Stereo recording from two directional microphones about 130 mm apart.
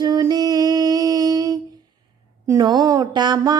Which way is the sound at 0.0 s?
30° right (ahead or behind).